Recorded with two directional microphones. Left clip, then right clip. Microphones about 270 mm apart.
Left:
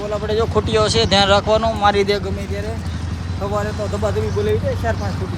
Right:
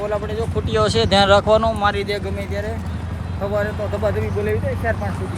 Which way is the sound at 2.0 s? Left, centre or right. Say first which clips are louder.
Left 6 dB; left.